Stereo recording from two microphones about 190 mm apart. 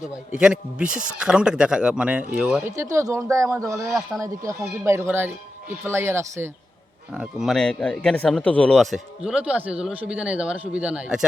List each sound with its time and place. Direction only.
0.3 s speech: 5° right (ahead or behind)
2.7 s speech: 15° right (ahead or behind)
7.1 s speech: 5° right (ahead or behind)